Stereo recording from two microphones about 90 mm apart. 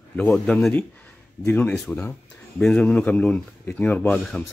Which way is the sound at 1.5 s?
15° left (ahead or behind).